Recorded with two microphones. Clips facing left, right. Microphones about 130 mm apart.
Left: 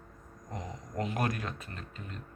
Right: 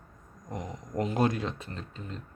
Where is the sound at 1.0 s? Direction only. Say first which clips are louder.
Right 5 dB; 30° right (ahead or behind).